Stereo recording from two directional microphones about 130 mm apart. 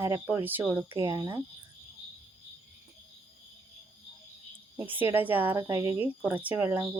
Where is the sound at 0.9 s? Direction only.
25° right (ahead or behind).